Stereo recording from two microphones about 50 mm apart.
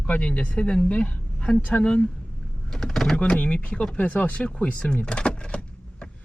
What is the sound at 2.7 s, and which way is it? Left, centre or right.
Speech, centre.